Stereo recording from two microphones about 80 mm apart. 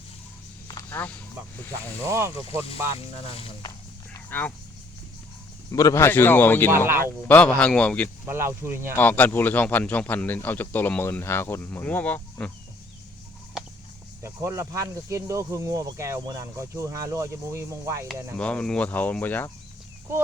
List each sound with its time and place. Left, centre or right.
0.9 s speech: centre
2.0 s speech: right
3.6 s walk: left
4.3 s speech: left
5.7 s speech: left
6.1 s speech: left
6.7 s speech: right
7.3 s a man's voice: centre
8.3 s speech: right
9.0 s speech: left
14.2 s speech: right
18.3 s a man's voice: centre
18.9 s speech: left